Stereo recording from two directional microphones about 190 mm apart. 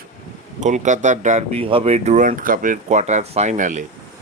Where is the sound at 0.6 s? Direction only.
40° right (ahead or behind).